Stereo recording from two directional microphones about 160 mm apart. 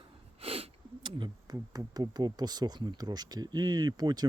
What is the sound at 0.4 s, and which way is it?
Speech, 35° right (ahead or behind).